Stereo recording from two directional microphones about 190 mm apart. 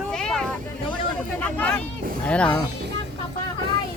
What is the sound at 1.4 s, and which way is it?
Speech, 5° left (ahead or behind).